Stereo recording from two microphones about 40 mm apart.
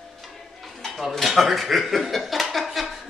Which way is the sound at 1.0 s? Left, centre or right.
Centre.